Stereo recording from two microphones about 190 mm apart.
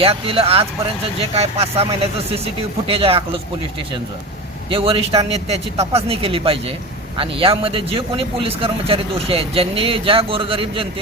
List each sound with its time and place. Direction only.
0.0 s a man's voice: 30° right (ahead or behind)
4.7 s a man's voice: 30° right (ahead or behind)